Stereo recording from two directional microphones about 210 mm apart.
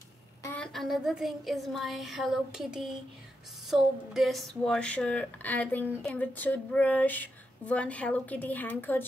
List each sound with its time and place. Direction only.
0.4 s a woman's voice: 10° left (ahead or behind)